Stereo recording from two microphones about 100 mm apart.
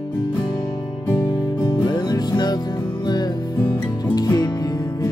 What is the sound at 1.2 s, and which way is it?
Music, 45° left (ahead or behind).